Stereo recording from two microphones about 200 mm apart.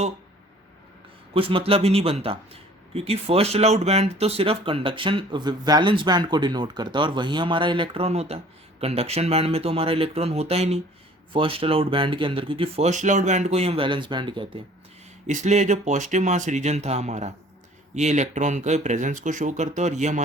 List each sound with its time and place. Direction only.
1.3 s speech: 25° right (ahead or behind)
15.3 s speech: 35° right (ahead or behind)